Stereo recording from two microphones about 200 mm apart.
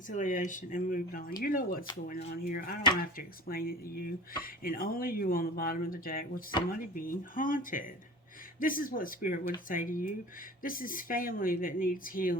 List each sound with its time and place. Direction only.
0.1 s speech: 40° left (ahead or behind)